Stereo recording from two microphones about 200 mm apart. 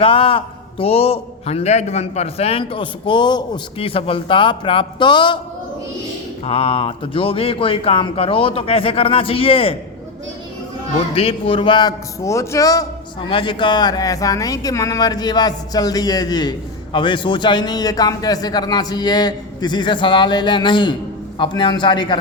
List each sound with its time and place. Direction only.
0.0 s a man's voice: 25° left (ahead or behind)
6.4 s a man's voice: 30° left (ahead or behind)
10.9 s a man's voice: 30° left (ahead or behind)